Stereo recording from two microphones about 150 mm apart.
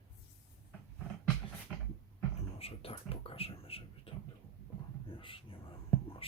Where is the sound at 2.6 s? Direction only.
40° left (ahead or behind).